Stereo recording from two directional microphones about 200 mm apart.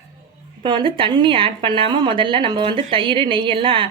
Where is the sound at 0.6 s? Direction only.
25° right (ahead or behind).